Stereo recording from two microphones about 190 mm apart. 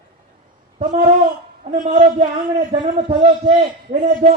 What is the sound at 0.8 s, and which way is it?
Speech, 30° right (ahead or behind).